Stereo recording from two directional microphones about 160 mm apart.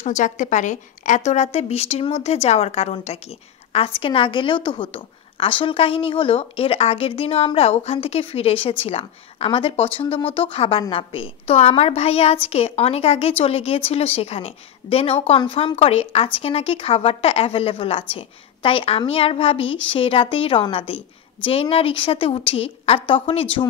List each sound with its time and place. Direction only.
0.0 s a woman's voice: 50° left (ahead or behind); by 23.7 s 35° left (ahead or behind)